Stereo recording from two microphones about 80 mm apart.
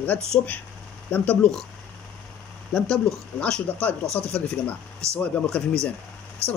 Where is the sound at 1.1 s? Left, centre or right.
Left.